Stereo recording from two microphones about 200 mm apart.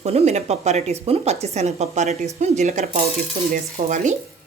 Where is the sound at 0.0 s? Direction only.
35° right (ahead or behind).